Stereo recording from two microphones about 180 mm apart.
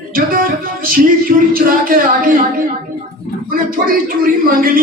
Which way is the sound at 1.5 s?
50° right (ahead or behind).